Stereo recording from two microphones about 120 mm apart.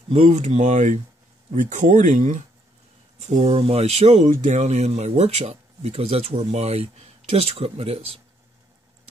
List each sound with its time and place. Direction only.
0.1 s speech: 70° right (ahead or behind); by 2.4 s 90° right
3.2 s speech: 60° right (ahead or behind)
4.4 s speech: 80° right; by 8.2 s 55° right (ahead or behind)